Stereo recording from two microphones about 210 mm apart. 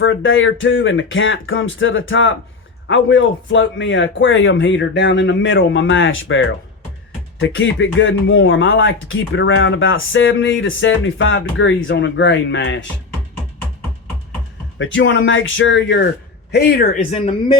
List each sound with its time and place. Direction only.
0.0 s speech: 65° left (ahead or behind)
14.8 s speech: 65° left (ahead or behind); by 17.3 s 30° left (ahead or behind)